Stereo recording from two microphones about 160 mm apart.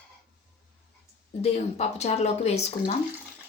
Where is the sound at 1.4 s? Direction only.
45° left (ahead or behind).